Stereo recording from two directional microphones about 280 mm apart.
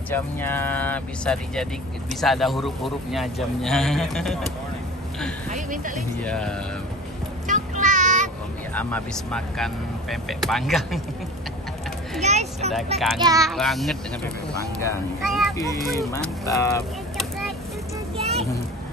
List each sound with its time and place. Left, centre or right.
0.1 s a man's voice: centre
5.5 s speech: right
5.9 s a man's voice: centre
7.4 s child singing: right
8.7 s a man's voice: centre
12.2 s a child's voice: right
13.2 s a child's voice: centre
13.5 s a man's voice: centre
16.0 s speech: centre
18.1 s children playing: right